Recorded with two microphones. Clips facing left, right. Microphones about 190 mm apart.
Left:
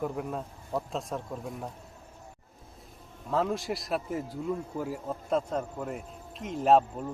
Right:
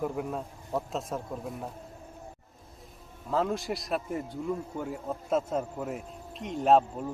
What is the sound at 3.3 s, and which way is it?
A man's voice, centre (ahead or behind).